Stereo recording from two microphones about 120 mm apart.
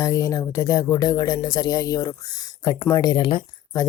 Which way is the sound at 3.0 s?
40° left (ahead or behind).